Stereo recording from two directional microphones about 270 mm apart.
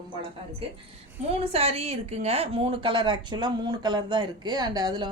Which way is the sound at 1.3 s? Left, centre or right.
Right.